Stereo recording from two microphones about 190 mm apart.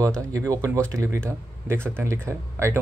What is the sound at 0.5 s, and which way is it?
Speech, 15° right (ahead or behind).